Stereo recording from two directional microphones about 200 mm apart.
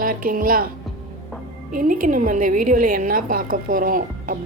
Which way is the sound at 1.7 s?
40° right (ahead or behind).